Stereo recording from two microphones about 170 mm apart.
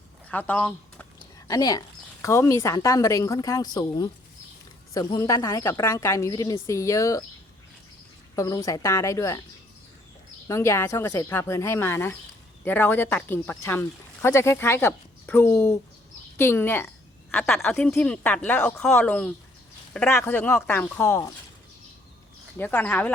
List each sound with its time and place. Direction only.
0.3 s speech: 10° left (ahead or behind)
1.5 s speech: 20° left (ahead or behind)
8.4 s speech: 20° left (ahead or behind)
10.5 s speech: 15° left (ahead or behind)
22.5 s speech: 10° left (ahead or behind)